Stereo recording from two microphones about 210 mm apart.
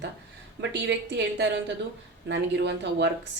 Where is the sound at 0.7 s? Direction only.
55° right (ahead or behind).